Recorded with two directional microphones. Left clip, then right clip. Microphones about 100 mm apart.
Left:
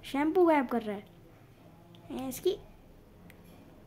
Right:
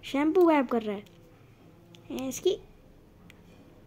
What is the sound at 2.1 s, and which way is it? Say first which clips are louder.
Speech: right 3 dB; 15° right (ahead or behind).